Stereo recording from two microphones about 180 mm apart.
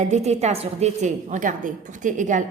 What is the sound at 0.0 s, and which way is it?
A woman's voice, 40° right (ahead or behind).